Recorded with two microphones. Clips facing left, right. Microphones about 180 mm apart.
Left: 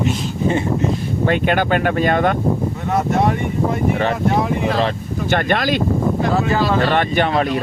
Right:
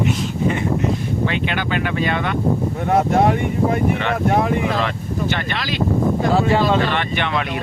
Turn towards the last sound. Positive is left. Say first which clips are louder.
# left 5 dB
turn(degrees=40)  # may be behind; listen again after turning